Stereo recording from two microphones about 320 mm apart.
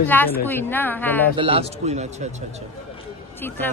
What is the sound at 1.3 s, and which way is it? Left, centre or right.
Speech, centre.